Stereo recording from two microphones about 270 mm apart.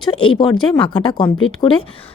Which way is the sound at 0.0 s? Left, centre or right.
Centre.